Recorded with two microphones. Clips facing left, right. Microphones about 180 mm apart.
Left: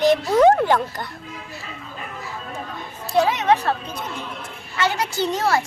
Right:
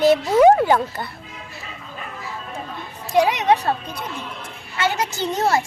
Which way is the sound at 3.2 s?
15° right (ahead or behind).